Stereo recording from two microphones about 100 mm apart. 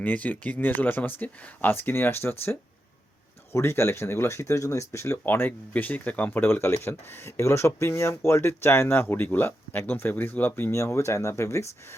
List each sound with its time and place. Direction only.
0.0 s speech: 15° left (ahead or behind)
3.5 s speech: 25° left (ahead or behind)